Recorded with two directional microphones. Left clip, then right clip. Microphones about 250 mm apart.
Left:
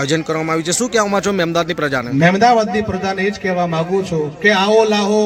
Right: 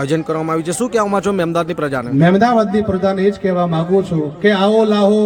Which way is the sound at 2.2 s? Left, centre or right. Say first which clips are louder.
Left 1 dB; right.